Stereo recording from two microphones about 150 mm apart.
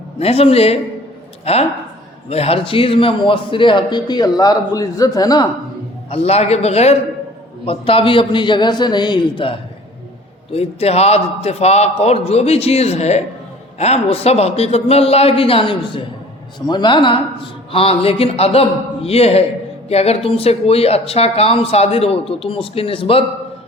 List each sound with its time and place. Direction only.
0.2 s a man's voice: 40° left (ahead or behind); by 5.5 s 25° left (ahead or behind)
6.1 s a man's voice: 45° left (ahead or behind)